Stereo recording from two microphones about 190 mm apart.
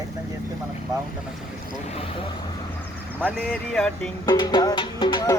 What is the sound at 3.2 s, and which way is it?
Speech, 10° right (ahead or behind).